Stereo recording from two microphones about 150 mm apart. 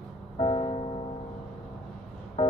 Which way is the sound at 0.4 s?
35° left (ahead or behind).